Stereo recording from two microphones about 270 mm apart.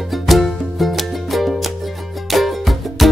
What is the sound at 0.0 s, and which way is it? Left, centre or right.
Music, centre.